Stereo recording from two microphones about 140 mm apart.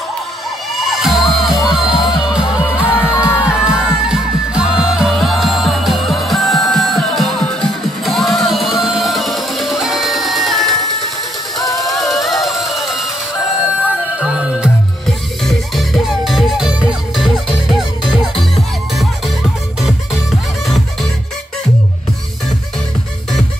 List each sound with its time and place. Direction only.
0.7 s music: centre (ahead or behind)
2.0 s music: 30° left (ahead or behind)
2.3 s music: 5° right (ahead or behind)
3.3 s music: 15° left (ahead or behind)
3.5 s music: 5° right (ahead or behind)